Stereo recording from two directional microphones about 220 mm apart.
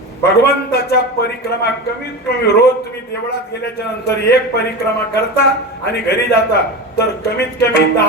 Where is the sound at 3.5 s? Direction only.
45° left (ahead or behind).